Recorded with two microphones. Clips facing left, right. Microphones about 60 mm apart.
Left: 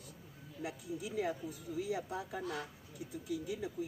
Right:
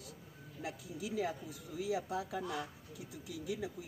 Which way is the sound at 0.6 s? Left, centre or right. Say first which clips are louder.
Left 1 dB; right.